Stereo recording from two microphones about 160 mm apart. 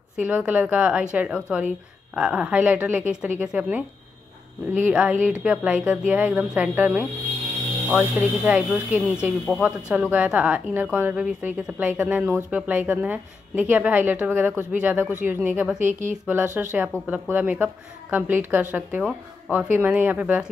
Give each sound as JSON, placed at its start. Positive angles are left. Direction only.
{"t": 0.2, "sound": "speech", "side_deg": -10}
{"t": 15.9, "sound": "speech", "side_deg": -50}
{"t": 16.5, "sound": "speech", "side_deg": -10}